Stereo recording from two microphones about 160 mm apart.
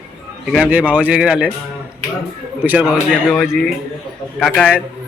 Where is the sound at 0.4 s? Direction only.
5° right (ahead or behind).